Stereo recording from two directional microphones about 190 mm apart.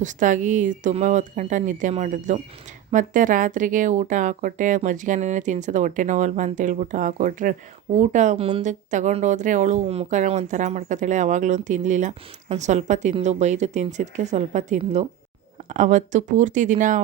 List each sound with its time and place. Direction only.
0.0 s speech: 40° right (ahead or behind)